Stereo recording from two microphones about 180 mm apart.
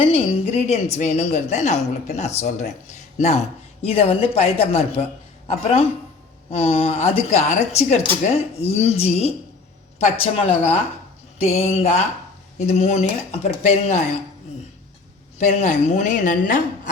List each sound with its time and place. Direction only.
0.0 s speech: 30° left (ahead or behind)
15.4 s a woman's voice: 40° left (ahead or behind)